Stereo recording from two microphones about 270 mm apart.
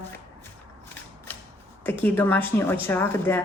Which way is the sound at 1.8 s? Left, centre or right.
Centre.